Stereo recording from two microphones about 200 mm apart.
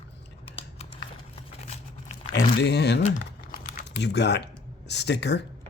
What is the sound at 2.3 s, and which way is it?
Speech, 60° left (ahead or behind).